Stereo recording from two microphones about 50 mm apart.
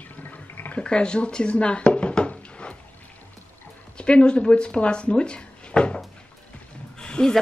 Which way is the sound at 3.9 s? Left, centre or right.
Left.